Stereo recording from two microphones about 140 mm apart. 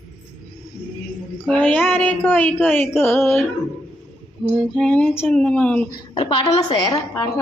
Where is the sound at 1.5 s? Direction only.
10° left (ahead or behind).